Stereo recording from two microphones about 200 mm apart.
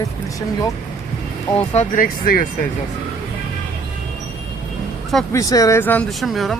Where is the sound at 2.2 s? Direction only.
45° left (ahead or behind).